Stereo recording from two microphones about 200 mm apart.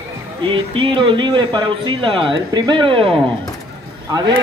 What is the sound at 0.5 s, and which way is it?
Speech, 25° right (ahead or behind).